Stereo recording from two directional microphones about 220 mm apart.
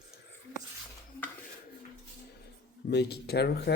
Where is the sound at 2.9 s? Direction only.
50° left (ahead or behind).